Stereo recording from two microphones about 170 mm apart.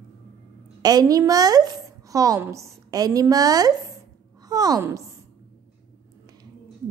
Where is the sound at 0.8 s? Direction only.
20° right (ahead or behind).